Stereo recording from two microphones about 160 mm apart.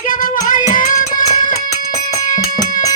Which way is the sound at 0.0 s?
55° left (ahead or behind).